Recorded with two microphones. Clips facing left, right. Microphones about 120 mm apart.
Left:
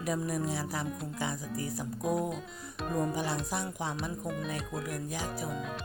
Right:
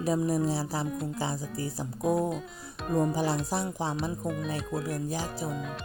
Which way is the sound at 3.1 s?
35° right (ahead or behind).